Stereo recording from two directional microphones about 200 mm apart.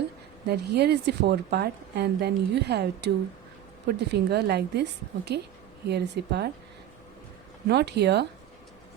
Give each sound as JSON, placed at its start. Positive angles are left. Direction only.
{"t": 0.4, "sound": "a woman's voice", "side_deg": -55}
{"t": 7.7, "sound": "a woman's voice", "side_deg": -55}